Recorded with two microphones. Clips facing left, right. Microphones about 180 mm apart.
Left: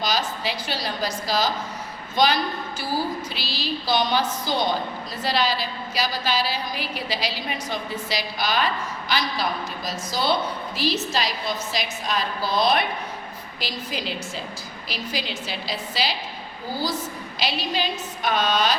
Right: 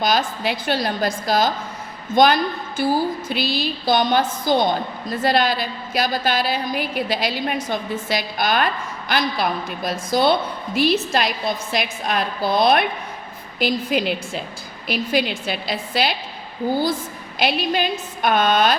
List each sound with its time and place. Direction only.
0.0 s a woman's voice: 55° right (ahead or behind)
17.4 s a woman's voice: 55° right (ahead or behind)